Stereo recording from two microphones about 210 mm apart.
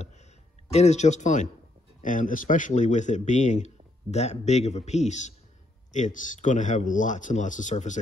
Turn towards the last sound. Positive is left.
turn(degrees=35)  # may be behind; listen again after turning